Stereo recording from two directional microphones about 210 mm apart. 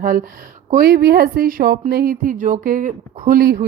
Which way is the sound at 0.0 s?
40° right (ahead or behind).